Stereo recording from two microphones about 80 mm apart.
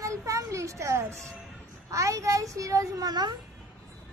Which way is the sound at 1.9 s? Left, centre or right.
Right.